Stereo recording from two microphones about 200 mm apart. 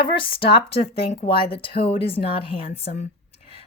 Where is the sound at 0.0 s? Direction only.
25° left (ahead or behind).